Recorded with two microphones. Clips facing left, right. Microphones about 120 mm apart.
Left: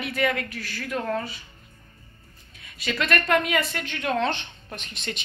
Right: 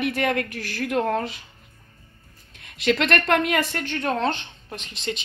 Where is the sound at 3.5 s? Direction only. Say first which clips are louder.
Right 2 dB; 45° right (ahead or behind).